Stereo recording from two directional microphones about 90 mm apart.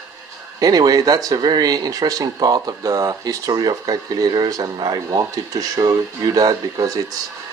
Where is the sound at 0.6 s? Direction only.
45° right (ahead or behind).